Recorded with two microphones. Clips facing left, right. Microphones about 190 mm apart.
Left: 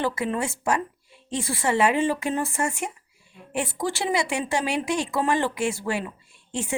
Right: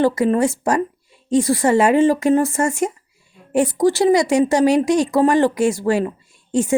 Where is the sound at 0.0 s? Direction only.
40° right (ahead or behind).